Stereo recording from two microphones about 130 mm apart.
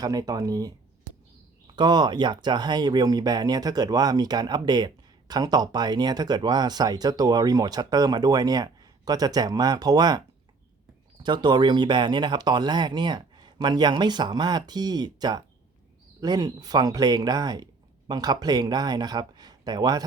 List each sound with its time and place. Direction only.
0.0 s speech: 30° right (ahead or behind)